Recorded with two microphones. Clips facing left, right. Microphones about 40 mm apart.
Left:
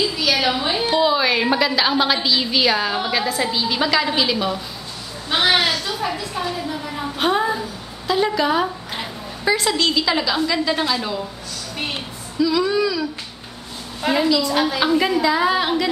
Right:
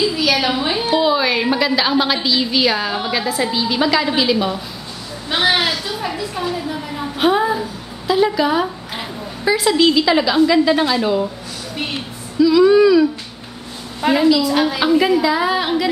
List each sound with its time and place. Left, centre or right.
0.0 s a woman's voice: centre
12.4 s a woman's voice: centre
12.7 s speech: centre
14.0 s a woman's voice: centre